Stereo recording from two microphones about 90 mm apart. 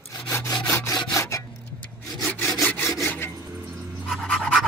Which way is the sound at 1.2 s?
35° left (ahead or behind).